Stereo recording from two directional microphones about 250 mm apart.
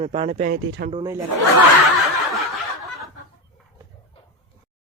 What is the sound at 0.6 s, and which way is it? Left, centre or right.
Speech, right.